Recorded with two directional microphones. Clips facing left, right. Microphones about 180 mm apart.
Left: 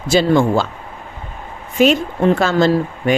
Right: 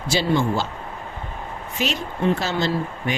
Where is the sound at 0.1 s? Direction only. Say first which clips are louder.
Left 7 dB; 50° left (ahead or behind).